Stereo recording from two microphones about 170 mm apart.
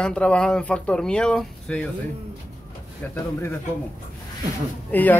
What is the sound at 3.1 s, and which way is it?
Speech, 15° left (ahead or behind).